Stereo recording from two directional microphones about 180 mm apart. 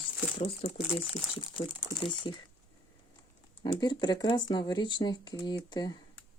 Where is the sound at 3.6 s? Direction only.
25° left (ahead or behind).